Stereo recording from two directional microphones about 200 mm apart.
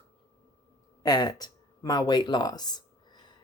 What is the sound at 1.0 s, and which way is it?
Speech, 20° left (ahead or behind).